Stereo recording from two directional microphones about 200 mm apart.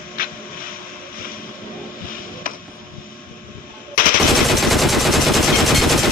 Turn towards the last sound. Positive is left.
turn(degrees=0)  # may be behind; listen again after turning